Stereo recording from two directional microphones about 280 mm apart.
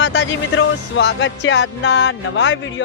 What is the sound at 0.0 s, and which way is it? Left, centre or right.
Music, left.